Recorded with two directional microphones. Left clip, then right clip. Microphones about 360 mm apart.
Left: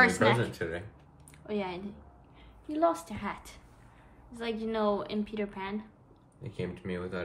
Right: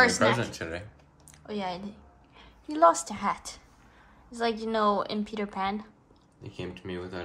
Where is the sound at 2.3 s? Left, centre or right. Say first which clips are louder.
Right 1 dB; centre.